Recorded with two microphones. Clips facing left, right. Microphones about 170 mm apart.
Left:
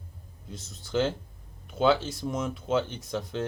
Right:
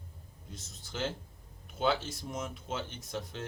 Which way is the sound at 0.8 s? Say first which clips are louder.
Left 10 dB; 90° left.